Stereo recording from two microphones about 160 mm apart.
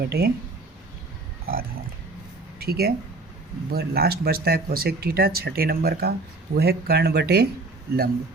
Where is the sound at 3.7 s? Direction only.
90° right.